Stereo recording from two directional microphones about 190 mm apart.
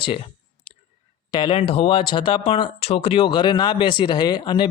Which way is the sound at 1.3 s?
25° left (ahead or behind).